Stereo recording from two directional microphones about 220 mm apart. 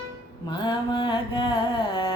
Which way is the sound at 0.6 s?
20° left (ahead or behind).